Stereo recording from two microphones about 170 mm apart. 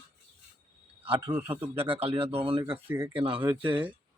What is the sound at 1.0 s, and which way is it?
Speech, 10° right (ahead or behind).